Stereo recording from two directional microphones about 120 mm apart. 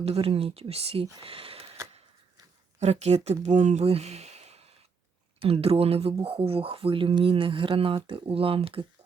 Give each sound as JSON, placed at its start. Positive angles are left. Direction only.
{"t": 0.0, "sound": "speech", "side_deg": -55}
{"t": 2.8, "sound": "speech", "side_deg": -65}
{"t": 3.4, "sound": "speech", "side_deg": -90}
{"t": 3.8, "sound": "a sound", "side_deg": -60}
{"t": 5.4, "sound": "speech", "side_deg": -50}